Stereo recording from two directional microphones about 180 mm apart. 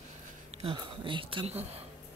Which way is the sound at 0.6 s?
30° right (ahead or behind).